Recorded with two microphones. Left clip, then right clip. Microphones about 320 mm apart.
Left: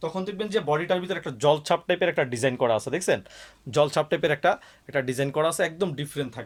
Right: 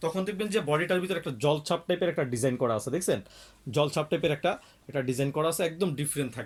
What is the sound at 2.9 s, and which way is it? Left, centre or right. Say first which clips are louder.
Speech: left 4 dB; left.